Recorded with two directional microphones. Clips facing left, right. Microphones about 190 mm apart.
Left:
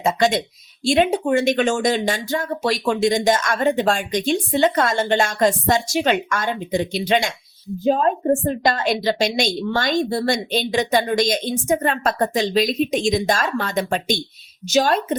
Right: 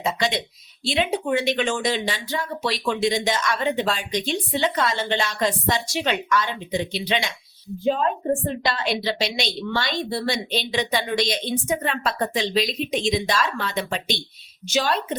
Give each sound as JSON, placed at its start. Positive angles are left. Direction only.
{"t": 0.0, "sound": "speech", "side_deg": 45}